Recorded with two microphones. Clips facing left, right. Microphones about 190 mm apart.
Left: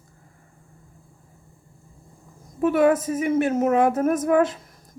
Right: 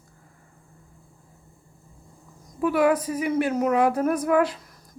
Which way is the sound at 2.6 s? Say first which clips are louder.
Left 2 dB; 25° left (ahead or behind).